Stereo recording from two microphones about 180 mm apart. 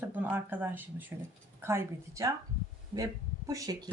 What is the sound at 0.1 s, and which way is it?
Speech, 10° right (ahead or behind).